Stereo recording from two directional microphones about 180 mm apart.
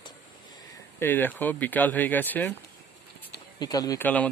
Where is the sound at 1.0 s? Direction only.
10° left (ahead or behind).